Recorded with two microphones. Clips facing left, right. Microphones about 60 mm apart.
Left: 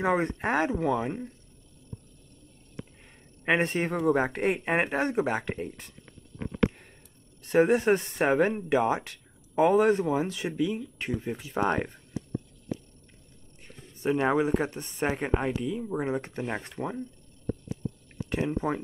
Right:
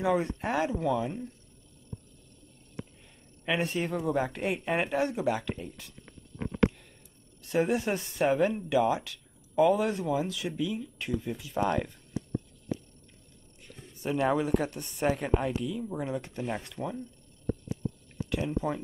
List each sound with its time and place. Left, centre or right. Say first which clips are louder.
0.0 s speech: left 2 dB; left
3.4 s speech: left 4 dB; left
7.4 s speech: left 6 dB; left
13.9 s speech: left 3 dB; left
18.3 s speech: left 2 dB; left